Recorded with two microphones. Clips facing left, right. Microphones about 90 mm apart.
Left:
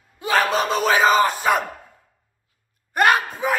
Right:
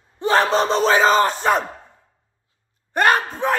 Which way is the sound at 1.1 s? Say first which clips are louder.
Right 1 dB; 5° left (ahead or behind).